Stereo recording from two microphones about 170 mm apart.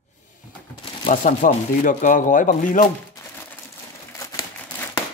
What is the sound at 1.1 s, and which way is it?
Speech, 50° left (ahead or behind).